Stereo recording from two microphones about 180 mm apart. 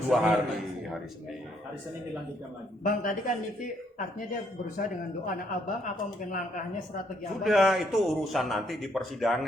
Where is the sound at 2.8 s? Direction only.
50° left (ahead or behind).